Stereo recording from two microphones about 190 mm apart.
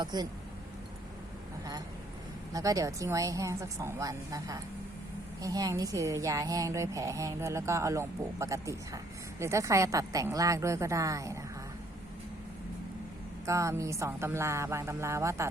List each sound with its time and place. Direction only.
0.0 s speech: 20° right (ahead or behind)
2.5 s speech: 20° right (ahead or behind)
13.4 s speech: 15° right (ahead or behind)